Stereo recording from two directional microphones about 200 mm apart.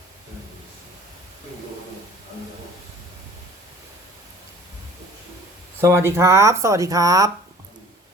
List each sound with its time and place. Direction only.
5.8 s speech: 15° right (ahead or behind)